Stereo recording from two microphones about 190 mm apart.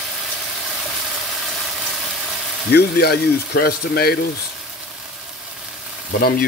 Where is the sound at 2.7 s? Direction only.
55° left (ahead or behind).